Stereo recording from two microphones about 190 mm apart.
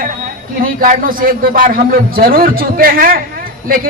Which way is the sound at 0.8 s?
45° right (ahead or behind).